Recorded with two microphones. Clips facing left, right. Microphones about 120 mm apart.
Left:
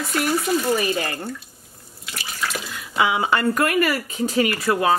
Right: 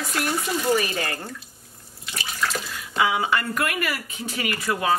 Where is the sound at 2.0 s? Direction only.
Centre (ahead or behind).